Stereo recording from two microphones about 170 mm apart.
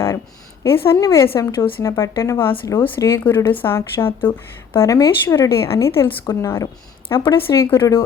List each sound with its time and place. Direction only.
0.9 s a woman's voice: 20° left (ahead or behind)